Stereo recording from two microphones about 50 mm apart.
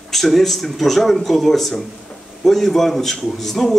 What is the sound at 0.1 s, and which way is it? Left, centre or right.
A man's voice, centre.